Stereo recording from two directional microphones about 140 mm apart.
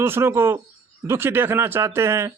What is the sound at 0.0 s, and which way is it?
Speech, 15° right (ahead or behind).